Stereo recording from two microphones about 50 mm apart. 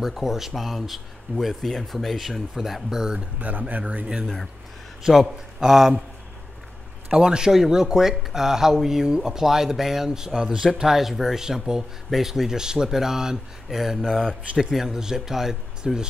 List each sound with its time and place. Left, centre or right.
0.0 s speech: centre
3.3 s speech: right
4.2 s speech: centre
5.0 s speech: centre
7.1 s speech: centre
10.7 s speech: centre
14.0 s speech: centre
14.6 s speech: centre